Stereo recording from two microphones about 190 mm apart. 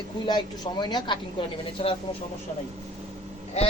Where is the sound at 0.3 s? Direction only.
25° left (ahead or behind).